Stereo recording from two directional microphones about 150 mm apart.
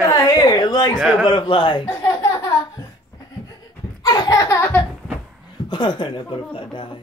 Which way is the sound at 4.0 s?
30° left (ahead or behind).